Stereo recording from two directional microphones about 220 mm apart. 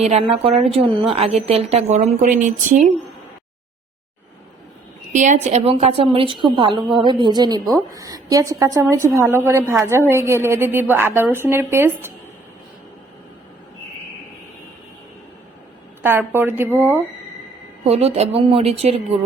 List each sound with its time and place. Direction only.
0.0 s a woman's voice: 30° right (ahead or behind)
5.1 s a woman's voice: 35° right (ahead or behind); by 12.1 s 10° right (ahead or behind)
16.0 s a woman's voice: 10° right (ahead or behind)
17.8 s a woman's voice: 30° right (ahead or behind)